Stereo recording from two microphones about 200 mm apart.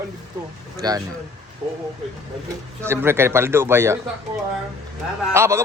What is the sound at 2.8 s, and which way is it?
A man's voice, 10° right (ahead or behind).